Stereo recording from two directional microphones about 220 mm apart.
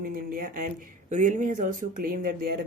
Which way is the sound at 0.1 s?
40° right (ahead or behind).